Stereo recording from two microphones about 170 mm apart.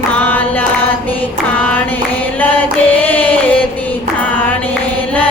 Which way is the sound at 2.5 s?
10° left (ahead or behind).